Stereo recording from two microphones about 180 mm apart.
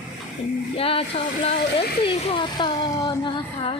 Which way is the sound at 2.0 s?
25° left (ahead or behind).